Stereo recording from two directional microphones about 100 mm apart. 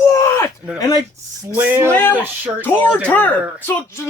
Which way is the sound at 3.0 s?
15° left (ahead or behind).